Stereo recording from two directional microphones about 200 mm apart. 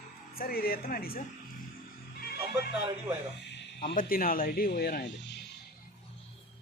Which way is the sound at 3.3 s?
60° left (ahead or behind).